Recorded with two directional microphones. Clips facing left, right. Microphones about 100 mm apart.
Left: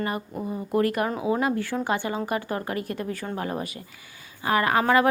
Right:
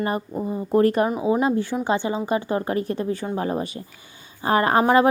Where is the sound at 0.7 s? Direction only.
35° right (ahead or behind).